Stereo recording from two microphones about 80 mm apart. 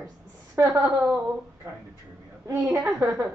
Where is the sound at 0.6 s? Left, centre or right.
Right.